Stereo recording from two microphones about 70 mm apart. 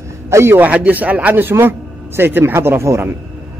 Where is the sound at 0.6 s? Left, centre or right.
Right.